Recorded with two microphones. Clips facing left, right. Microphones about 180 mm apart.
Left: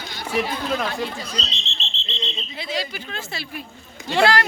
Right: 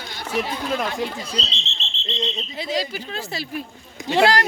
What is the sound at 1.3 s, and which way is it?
Speech, 30° right (ahead or behind).